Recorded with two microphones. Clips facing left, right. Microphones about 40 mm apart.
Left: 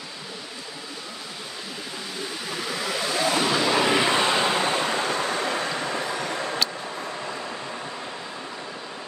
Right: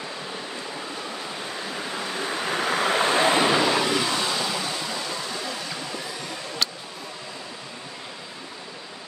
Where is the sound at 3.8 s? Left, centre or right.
Left.